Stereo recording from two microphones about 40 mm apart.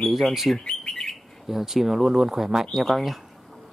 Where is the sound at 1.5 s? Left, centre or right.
Centre.